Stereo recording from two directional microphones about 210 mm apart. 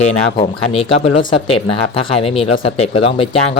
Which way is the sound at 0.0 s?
30° left (ahead or behind).